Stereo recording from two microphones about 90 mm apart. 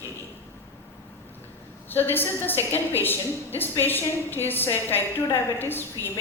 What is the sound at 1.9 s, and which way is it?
Speech, 20° left (ahead or behind).